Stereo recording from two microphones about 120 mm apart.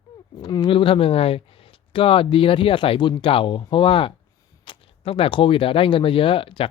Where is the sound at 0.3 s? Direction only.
40° left (ahead or behind).